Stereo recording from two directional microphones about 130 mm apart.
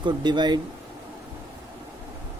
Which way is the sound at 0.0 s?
35° right (ahead or behind).